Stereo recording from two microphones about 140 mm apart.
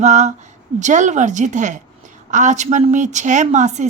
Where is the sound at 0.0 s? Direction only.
55° right (ahead or behind).